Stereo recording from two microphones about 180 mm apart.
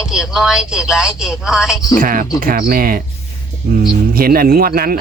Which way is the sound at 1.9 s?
50° right (ahead or behind).